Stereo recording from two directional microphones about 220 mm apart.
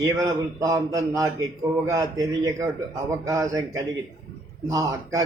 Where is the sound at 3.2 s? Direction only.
15° right (ahead or behind).